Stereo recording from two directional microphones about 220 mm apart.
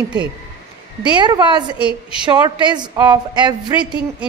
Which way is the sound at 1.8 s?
5° right (ahead or behind).